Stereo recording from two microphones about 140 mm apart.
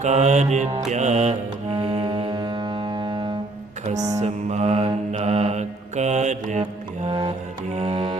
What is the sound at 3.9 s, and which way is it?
Mantra, 25° right (ahead or behind).